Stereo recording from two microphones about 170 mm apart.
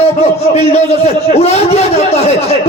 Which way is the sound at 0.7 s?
40° left (ahead or behind).